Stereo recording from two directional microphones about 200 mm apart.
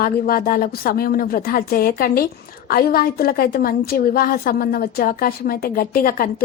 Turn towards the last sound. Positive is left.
turn(degrees=45)  # may be behind; listen again after turning